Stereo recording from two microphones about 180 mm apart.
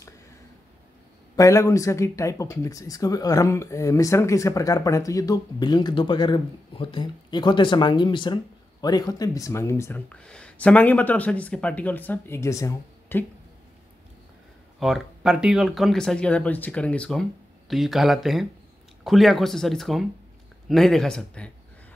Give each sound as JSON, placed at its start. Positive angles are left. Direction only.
{"t": 1.3, "sound": "speech", "side_deg": 15}
{"t": 14.8, "sound": "speech", "side_deg": 0}